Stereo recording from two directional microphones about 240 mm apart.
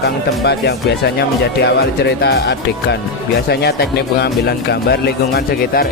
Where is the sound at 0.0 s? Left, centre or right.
Left.